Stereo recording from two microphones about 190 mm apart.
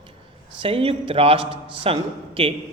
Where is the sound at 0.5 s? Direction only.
30° right (ahead or behind).